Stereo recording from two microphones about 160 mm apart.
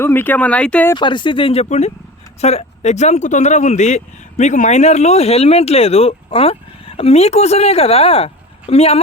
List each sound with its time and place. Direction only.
0.0 s speech: 15° left (ahead or behind)
0.9 s speech: 30° left (ahead or behind)